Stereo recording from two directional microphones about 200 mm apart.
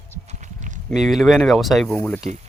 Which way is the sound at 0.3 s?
35° right (ahead or behind).